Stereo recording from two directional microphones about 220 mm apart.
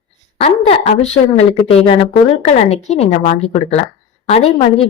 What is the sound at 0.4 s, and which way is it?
A woman's voice, 30° left (ahead or behind).